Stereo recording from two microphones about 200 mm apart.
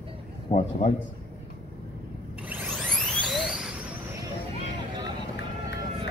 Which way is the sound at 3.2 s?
Centre (ahead or behind).